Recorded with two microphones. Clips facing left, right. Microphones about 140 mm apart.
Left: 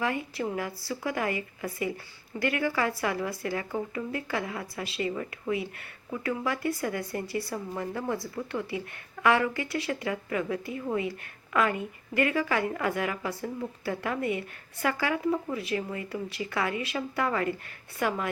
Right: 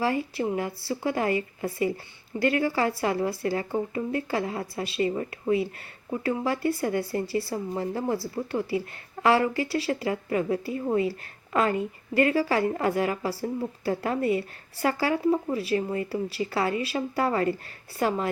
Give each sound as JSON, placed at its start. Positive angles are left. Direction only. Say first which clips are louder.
{"t": 0.0, "sound": "a woman's voice", "louder": "right 4 dB", "side_deg": -30}